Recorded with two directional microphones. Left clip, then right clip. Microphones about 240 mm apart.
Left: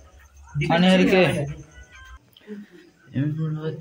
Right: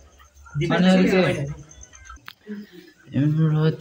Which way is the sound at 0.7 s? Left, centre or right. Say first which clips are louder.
Left 1 dB; left.